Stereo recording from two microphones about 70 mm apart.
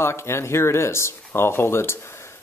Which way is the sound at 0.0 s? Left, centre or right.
Left.